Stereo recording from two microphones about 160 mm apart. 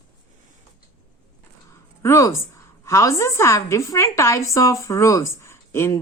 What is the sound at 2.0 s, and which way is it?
A woman's voice, 15° left (ahead or behind).